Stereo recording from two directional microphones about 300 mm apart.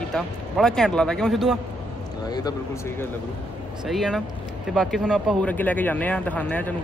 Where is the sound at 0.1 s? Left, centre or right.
Centre.